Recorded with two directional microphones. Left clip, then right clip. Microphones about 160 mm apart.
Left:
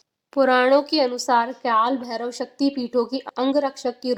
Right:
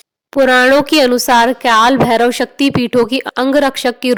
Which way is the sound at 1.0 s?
45° right (ahead or behind).